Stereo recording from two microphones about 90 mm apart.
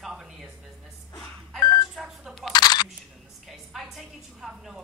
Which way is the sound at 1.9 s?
5° right (ahead or behind).